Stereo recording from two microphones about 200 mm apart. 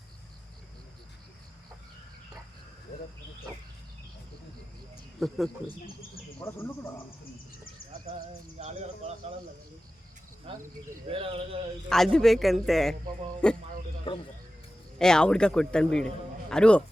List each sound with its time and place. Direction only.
5.2 s a man's voice: centre (ahead or behind)
6.4 s speech: 10° left (ahead or behind)
8.5 s speech: 30° right (ahead or behind)
11.1 s speech: 30° right (ahead or behind)
11.9 s a man's voice: centre (ahead or behind)
14.1 s speech: 25° left (ahead or behind)
14.9 s a man's voice: 5° left (ahead or behind)